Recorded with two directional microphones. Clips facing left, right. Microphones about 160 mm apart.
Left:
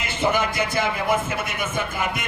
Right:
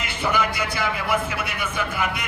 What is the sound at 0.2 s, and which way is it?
Speech, 25° left (ahead or behind).